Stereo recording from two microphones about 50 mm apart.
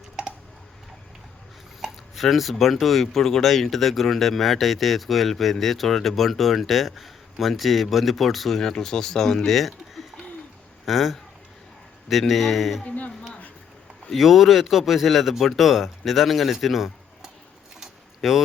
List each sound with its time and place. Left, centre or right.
1.8 s speech: centre
12.3 s speech: centre
12.8 s speech: left
14.1 s speech: centre
17.7 s a sound: centre